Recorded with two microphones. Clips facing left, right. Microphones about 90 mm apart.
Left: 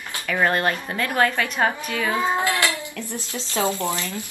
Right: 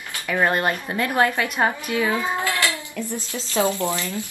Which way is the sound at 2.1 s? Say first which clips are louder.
Left 2 dB; 20° left (ahead or behind).